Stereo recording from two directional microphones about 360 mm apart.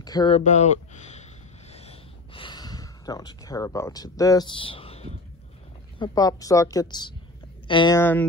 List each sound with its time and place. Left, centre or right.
0.0 s speech: centre
1.7 s a sound: centre
5.9 s speech: centre